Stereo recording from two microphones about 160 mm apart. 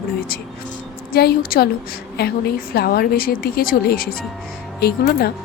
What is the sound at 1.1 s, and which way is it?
Speech, 75° left (ahead or behind).